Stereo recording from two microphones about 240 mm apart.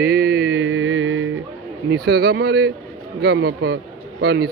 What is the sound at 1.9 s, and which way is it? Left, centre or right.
A man's voice, right.